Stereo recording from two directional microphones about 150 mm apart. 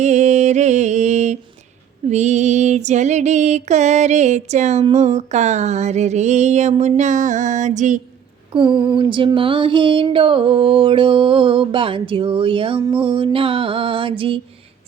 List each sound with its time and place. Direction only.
0.0 s mantra: 50° right (ahead or behind)
2.0 s female singing: 50° right (ahead or behind)
8.5 s a sound: 35° right (ahead or behind)